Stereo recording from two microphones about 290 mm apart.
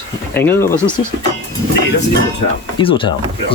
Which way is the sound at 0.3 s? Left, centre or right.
Centre.